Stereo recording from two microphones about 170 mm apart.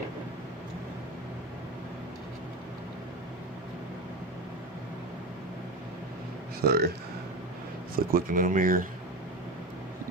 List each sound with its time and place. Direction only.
6.7 s speech: 65° right (ahead or behind)
7.9 s speech: 55° right (ahead or behind)